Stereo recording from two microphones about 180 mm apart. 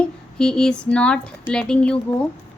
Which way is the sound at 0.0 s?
5° left (ahead or behind).